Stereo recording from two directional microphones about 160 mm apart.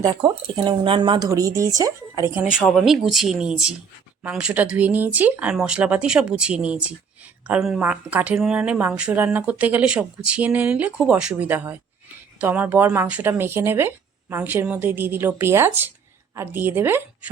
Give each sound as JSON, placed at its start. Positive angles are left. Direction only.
{"t": 0.0, "sound": "speech", "side_deg": -25}
{"t": 1.3, "sound": "speech", "side_deg": -20}
{"t": 2.4, "sound": "speech", "side_deg": -5}